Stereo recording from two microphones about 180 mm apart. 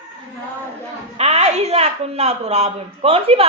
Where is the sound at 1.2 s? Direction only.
35° right (ahead or behind).